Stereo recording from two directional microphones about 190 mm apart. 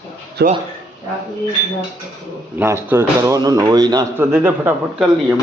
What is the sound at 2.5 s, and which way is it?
Speech, 10° right (ahead or behind).